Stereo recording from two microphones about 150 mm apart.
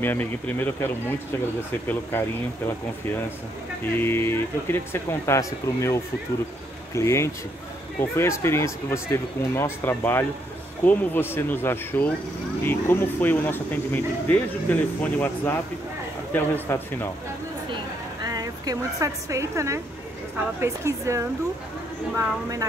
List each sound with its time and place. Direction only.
0.0 s speech: 15° left (ahead or behind)
2.1 s speech: 15° left (ahead or behind)
4.0 s speech: 15° left (ahead or behind)
7.0 s speech: 20° left (ahead or behind)
18.2 s a woman's voice: 25° right (ahead or behind)